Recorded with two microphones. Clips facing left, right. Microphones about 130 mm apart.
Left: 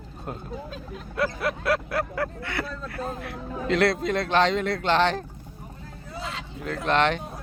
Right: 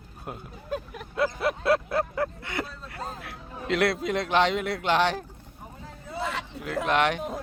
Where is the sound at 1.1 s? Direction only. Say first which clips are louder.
Right 1 dB; 25° right (ahead or behind).